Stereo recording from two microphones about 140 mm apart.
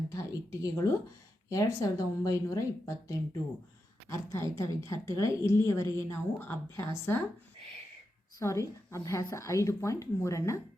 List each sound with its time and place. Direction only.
0.1 s a sound: 25° left (ahead or behind)
1.5 s a woman's voice: 25° left (ahead or behind)
8.4 s a woman's voice: 20° left (ahead or behind)